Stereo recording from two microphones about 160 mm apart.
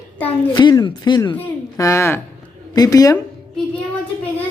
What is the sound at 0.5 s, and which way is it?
Speech, 30° left (ahead or behind).